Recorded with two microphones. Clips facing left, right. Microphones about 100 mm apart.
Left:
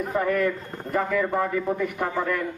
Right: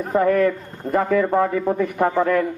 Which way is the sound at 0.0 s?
35° right (ahead or behind).